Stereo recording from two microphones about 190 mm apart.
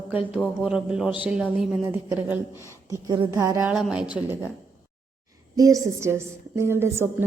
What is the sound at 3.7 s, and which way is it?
Speech, 5° right (ahead or behind).